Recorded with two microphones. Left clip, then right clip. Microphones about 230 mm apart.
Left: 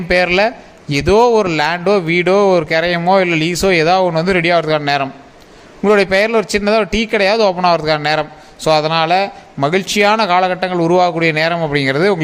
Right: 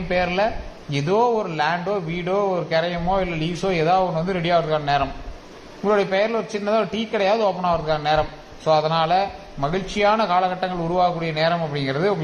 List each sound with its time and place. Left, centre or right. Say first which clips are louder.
0.1 s a man's voice: left 8 dB; left